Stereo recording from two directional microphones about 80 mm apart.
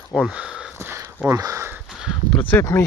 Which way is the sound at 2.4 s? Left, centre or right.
Left.